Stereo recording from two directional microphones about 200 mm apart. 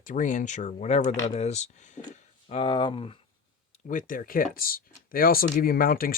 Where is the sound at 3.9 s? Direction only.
40° left (ahead or behind).